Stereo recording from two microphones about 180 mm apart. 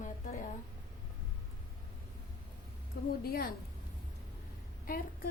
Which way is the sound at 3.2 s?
55° left (ahead or behind).